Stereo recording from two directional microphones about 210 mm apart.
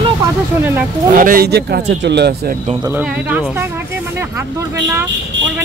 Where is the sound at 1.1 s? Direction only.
40° right (ahead or behind).